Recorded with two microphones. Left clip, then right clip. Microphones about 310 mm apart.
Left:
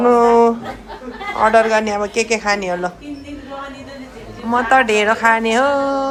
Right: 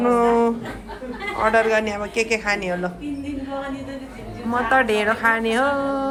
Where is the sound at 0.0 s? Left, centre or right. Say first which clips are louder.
Left 6 dB; centre.